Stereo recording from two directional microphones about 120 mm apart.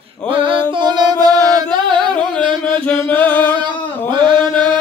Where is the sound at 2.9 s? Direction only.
15° left (ahead or behind).